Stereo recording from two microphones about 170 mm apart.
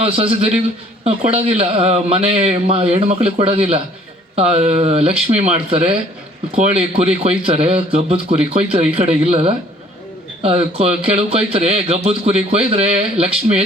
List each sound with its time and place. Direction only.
0.0 s a man's voice: 35° right (ahead or behind)